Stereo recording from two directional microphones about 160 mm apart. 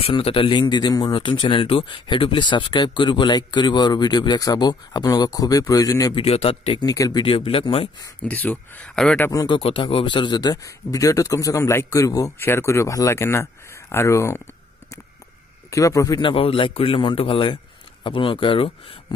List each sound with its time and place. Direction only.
0.0 s speech: 35° left (ahead or behind)
6.1 s a man's voice: 40° left (ahead or behind)
6.8 s a man's voice: 25° left (ahead or behind)
8.2 s speech: 10° left (ahead or behind)
9.3 s speech: 25° left (ahead or behind)
15.7 s a man's voice: 20° left (ahead or behind)